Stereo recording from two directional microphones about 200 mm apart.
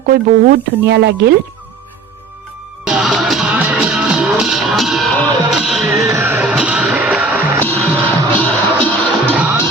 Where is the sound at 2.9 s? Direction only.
5° right (ahead or behind).